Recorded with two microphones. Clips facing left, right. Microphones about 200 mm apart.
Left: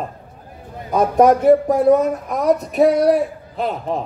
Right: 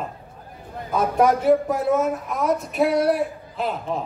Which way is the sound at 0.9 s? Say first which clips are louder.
Left 6 dB; 40° left (ahead or behind).